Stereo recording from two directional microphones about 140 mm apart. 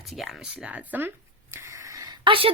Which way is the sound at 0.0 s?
Centre (ahead or behind).